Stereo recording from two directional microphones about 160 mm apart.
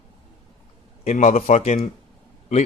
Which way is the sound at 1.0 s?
45° left (ahead or behind).